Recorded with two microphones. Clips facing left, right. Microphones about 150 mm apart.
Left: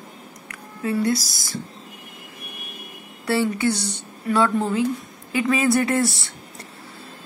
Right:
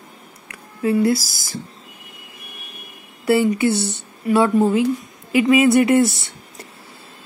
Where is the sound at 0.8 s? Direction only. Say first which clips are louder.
Right 5 dB; 25° right (ahead or behind).